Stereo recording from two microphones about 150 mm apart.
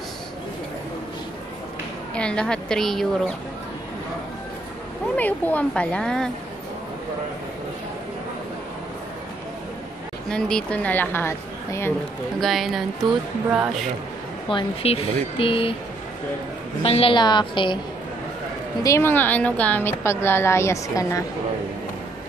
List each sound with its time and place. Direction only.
2.1 s speech: 5° left (ahead or behind)
5.1 s a woman's voice: 10° left (ahead or behind)
10.3 s a woman's voice: 5° left (ahead or behind)
12.4 s speech: centre (ahead or behind)
14.5 s speech: 35° left (ahead or behind)
16.8 s speech: 40° left (ahead or behind)
18.8 s a woman's voice: 20° left (ahead or behind)